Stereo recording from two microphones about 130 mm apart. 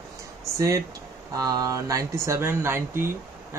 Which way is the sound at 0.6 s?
25° right (ahead or behind).